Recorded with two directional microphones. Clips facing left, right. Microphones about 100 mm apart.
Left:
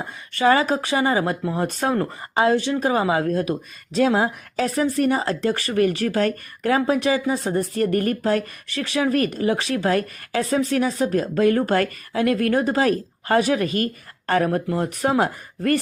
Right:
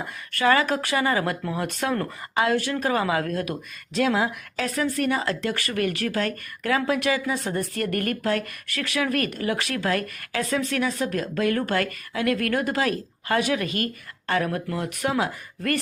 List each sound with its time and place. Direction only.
0.3 s speech: 30° left (ahead or behind)